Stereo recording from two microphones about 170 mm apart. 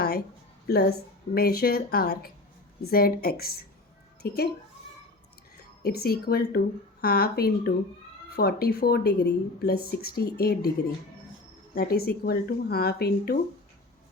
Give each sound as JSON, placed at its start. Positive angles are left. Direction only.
{"t": 0.7, "sound": "a woman's voice", "side_deg": 70}
{"t": 5.8, "sound": "a woman's voice", "side_deg": 65}
{"t": 11.7, "sound": "a woman's voice", "side_deg": 60}